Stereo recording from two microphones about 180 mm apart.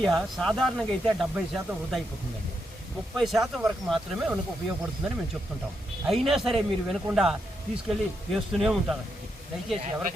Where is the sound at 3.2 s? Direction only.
Centre (ahead or behind).